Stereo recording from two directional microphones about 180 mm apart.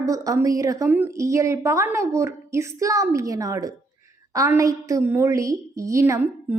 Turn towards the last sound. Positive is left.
turn(degrees=-15)  # may be behind; listen again after turning